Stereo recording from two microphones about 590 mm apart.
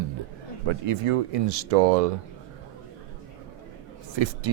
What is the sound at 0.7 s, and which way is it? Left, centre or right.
Speech, right.